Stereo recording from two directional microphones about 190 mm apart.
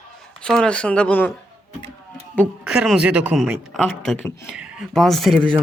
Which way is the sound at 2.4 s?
Centre (ahead or behind).